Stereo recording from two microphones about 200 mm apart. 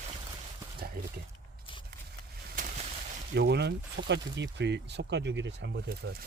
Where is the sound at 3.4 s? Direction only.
55° right (ahead or behind).